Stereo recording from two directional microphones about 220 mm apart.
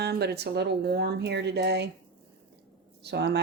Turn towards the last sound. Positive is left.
turn(degrees=-50)  # may be behind; listen again after turning